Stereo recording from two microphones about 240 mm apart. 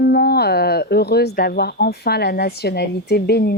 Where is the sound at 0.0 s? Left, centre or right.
Left.